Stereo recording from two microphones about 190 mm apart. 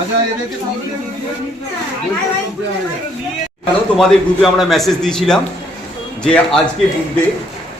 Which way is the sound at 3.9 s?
Centre (ahead or behind).